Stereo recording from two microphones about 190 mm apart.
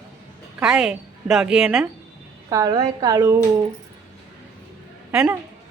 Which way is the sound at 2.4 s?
20° right (ahead or behind).